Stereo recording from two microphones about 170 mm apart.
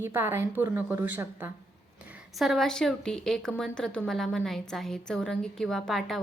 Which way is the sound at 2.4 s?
Centre (ahead or behind).